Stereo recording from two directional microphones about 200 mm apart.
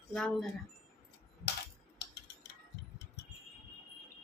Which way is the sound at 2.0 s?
60° left (ahead or behind).